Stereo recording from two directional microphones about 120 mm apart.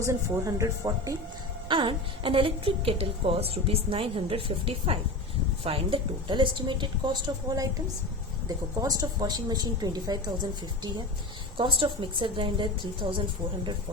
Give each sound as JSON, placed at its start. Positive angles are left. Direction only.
{"t": 0.0, "sound": "speech", "side_deg": -25}
{"t": 1.6, "sound": "a woman's voice", "side_deg": -45}
{"t": 11.5, "sound": "a woman's voice", "side_deg": -45}